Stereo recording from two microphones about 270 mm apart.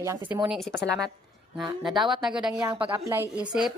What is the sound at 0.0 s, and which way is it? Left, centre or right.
Speech, centre.